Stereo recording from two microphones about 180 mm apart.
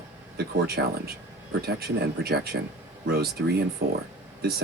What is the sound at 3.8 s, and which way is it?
Speech, 60° right (ahead or behind).